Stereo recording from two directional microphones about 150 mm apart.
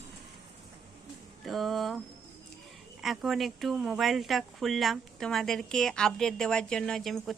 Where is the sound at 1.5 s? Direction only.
Centre (ahead or behind).